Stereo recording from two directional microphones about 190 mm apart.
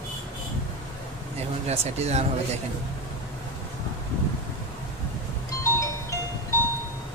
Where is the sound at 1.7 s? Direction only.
35° right (ahead or behind).